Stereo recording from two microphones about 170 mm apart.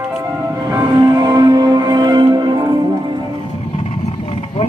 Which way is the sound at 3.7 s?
35° left (ahead or behind).